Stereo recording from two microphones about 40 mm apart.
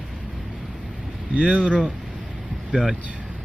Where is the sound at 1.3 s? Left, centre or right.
Centre.